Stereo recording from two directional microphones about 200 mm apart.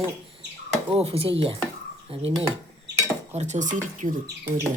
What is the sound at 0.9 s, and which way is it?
Speech, 30° right (ahead or behind).